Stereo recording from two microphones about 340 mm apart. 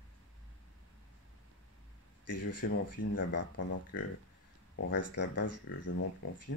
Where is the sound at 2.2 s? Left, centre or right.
Left.